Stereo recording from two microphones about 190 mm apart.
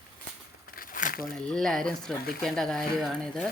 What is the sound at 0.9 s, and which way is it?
Crumpling, 45° left (ahead or behind).